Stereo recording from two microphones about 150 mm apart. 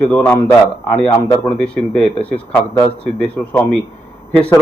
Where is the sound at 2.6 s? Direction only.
15° left (ahead or behind).